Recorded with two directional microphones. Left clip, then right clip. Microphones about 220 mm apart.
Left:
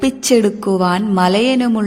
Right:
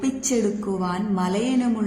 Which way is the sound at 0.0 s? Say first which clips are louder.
Left 10 dB; 45° left (ahead or behind).